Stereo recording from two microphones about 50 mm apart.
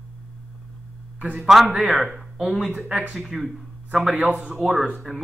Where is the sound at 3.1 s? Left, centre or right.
Centre.